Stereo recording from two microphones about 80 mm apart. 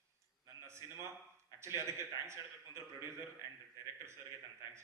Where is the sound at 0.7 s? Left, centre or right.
Right.